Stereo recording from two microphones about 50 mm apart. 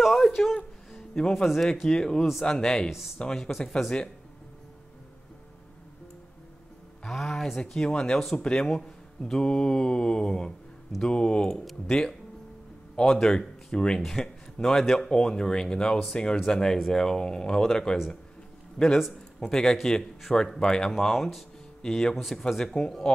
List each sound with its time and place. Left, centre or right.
0.0 s a sound: centre
0.9 s music: centre
1.3 s speech: centre
7.1 s speech: centre
20.9 s speech: centre